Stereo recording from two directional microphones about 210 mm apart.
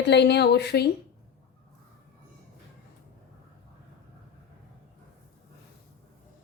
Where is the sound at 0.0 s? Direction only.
55° left (ahead or behind).